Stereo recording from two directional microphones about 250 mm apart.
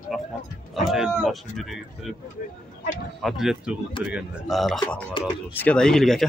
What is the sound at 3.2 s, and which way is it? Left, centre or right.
Speech, centre.